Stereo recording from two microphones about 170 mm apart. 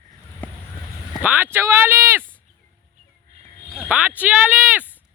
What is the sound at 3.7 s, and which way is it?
Speech, 10° right (ahead or behind).